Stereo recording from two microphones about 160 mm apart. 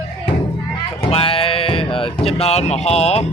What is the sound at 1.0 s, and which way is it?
Sheep, 35° left (ahead or behind).